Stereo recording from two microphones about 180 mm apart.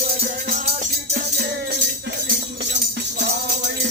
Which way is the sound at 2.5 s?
70° right (ahead or behind).